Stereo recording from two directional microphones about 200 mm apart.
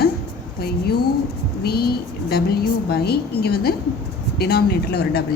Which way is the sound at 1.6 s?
50° left (ahead or behind).